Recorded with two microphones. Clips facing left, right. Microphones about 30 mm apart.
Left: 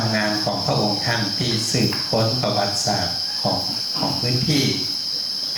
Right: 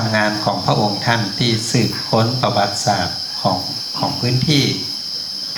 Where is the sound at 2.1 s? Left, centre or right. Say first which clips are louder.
Right 6 dB; right.